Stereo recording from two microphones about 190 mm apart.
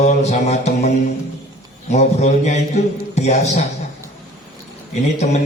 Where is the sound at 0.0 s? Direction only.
35° left (ahead or behind).